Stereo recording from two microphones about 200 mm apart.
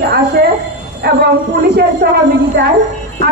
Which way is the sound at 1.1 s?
50° right (ahead or behind).